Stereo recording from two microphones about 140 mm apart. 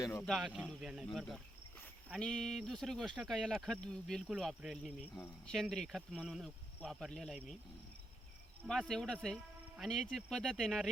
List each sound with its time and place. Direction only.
0.0 s speech: 15° left (ahead or behind)
0.3 s speech: centre (ahead or behind)
8.6 s speech: centre (ahead or behind)